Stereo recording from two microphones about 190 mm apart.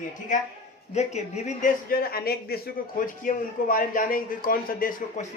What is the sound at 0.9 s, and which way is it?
A man's voice, 35° left (ahead or behind).